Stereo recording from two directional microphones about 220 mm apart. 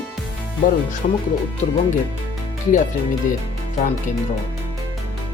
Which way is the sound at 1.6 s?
25° left (ahead or behind).